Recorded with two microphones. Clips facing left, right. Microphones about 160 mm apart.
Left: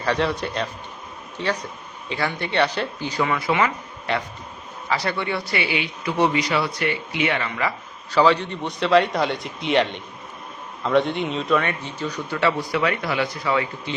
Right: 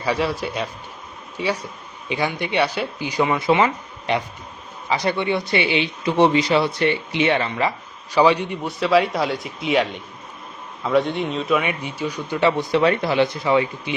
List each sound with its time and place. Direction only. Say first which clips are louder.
0.0 s a man's voice: even; 5° right (ahead or behind); by 7.7 s 30° right (ahead or behind)
8.1 s a man's voice: right 1 dB; 15° right (ahead or behind)